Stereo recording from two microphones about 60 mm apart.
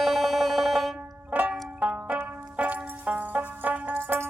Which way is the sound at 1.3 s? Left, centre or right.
Right.